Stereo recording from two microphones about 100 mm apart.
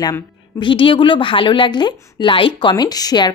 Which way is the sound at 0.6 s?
55° left (ahead or behind).